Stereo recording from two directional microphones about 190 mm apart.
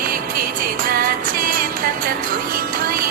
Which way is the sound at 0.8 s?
50° right (ahead or behind).